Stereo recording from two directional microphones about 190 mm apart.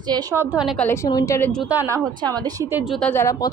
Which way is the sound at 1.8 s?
20° right (ahead or behind).